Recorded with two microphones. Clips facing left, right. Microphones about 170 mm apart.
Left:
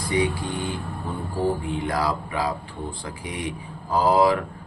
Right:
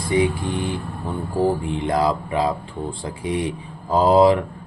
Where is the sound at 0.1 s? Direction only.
25° right (ahead or behind).